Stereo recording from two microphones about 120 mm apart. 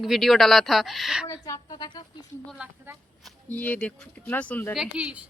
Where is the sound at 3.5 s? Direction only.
15° left (ahead or behind).